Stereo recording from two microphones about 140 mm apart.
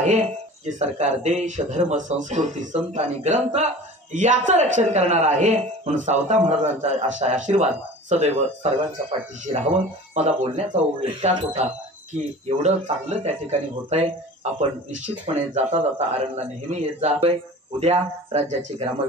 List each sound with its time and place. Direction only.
0.0 s speech: 60° right (ahead or behind)